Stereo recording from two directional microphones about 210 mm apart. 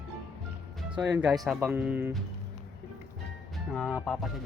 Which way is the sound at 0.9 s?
5° right (ahead or behind).